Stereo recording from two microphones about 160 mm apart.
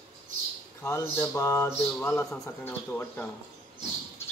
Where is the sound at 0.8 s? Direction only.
20° left (ahead or behind).